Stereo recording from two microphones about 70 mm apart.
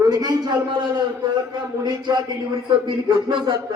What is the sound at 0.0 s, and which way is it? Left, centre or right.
A man's voice, right.